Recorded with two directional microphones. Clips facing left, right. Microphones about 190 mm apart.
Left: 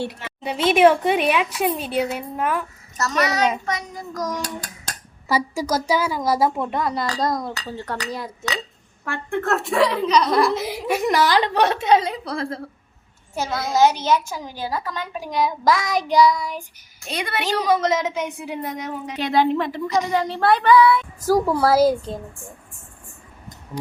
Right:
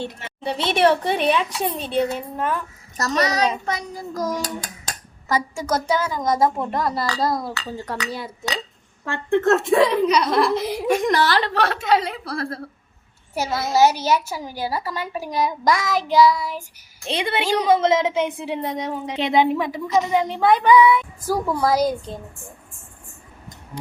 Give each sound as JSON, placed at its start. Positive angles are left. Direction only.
{"t": 0.4, "sound": "a child's voice", "side_deg": -30}
{"t": 0.7, "sound": "a woman's voice", "side_deg": 5}
{"t": 3.0, "sound": "a child's voice", "side_deg": -35}
{"t": 5.8, "sound": "a woman's voice", "side_deg": 10}
{"t": 9.3, "sound": "speech", "side_deg": -20}
{"t": 10.1, "sound": "speech", "side_deg": -5}
{"t": 13.3, "sound": "a woman's voice", "side_deg": -10}
{"t": 17.1, "sound": "a woman's voice", "side_deg": -25}
{"t": 20.1, "sound": "speech", "side_deg": -20}
{"t": 21.2, "sound": "a woman's voice", "side_deg": 10}